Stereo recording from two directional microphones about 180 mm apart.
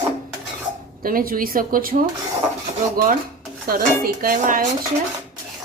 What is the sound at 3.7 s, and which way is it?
Speech, 55° right (ahead or behind).